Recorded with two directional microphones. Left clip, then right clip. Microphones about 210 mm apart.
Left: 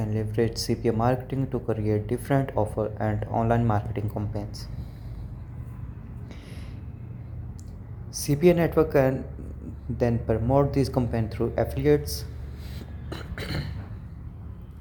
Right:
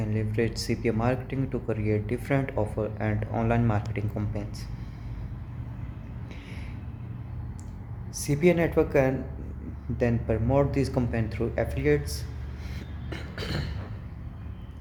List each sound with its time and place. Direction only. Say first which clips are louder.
0.0 s speech: left 2 dB; 10° left (ahead or behind)
8.1 s speech: left 3 dB; 15° left (ahead or behind)
13.1 s a sound: even; 25° left (ahead or behind)